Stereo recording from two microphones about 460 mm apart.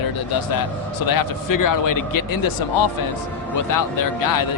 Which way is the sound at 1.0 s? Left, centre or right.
Left.